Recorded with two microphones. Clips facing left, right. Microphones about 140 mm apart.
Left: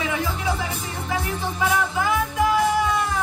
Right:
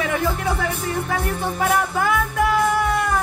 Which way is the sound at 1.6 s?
55° right (ahead or behind).